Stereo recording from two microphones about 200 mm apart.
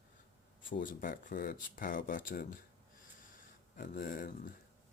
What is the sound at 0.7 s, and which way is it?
Speech, 45° left (ahead or behind).